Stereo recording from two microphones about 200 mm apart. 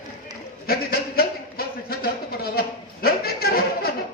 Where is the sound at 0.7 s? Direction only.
50° left (ahead or behind).